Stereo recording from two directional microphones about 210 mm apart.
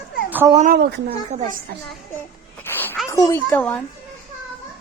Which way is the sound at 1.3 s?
35° right (ahead or behind).